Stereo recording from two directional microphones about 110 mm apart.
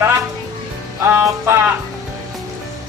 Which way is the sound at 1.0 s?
20° right (ahead or behind).